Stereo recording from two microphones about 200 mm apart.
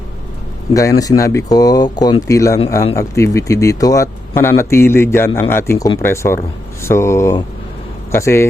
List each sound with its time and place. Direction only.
0.7 s speech: 15° left (ahead or behind)